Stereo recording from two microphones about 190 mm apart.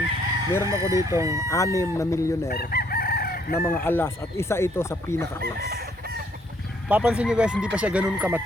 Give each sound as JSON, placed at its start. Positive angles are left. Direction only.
{"t": 0.6, "sound": "speech", "side_deg": -15}
{"t": 1.5, "sound": "speech", "side_deg": 15}
{"t": 2.5, "sound": "chicken", "side_deg": 50}
{"t": 3.7, "sound": "speech", "side_deg": 10}
{"t": 5.4, "sound": "chicken", "side_deg": -55}
{"t": 6.8, "sound": "speech", "side_deg": -5}